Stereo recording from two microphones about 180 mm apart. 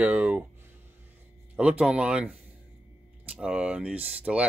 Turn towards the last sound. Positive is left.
turn(degrees=-5)  # may be behind; listen again after turning